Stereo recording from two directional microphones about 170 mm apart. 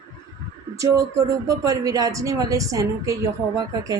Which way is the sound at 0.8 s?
20° right (ahead or behind).